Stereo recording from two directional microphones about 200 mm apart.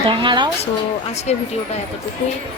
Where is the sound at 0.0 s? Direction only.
25° right (ahead or behind).